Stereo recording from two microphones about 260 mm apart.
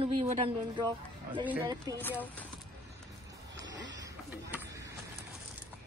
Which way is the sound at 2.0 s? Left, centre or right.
Centre.